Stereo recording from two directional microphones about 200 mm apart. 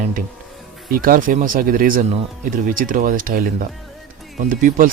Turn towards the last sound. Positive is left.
turn(degrees=-40)  # may be behind; listen again after turning